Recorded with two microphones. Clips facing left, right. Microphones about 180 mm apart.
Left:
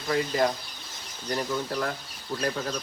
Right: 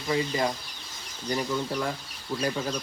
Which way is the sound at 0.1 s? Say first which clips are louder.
Left 2 dB; centre (ahead or behind).